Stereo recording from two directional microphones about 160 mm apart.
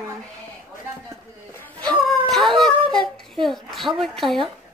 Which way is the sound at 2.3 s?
Centre (ahead or behind).